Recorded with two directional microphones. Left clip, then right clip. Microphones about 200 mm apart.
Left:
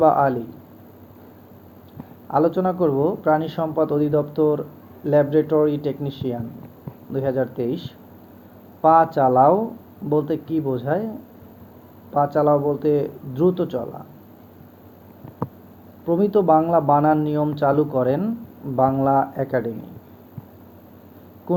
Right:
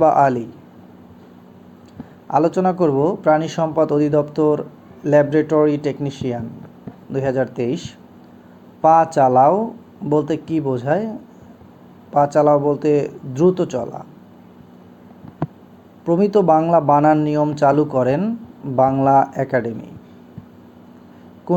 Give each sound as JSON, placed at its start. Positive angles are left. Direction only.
{"t": 0.0, "sound": "speech", "side_deg": -40}
{"t": 2.2, "sound": "speech", "side_deg": -35}
{"t": 12.1, "sound": "speech", "side_deg": -40}
{"t": 16.0, "sound": "speech", "side_deg": -35}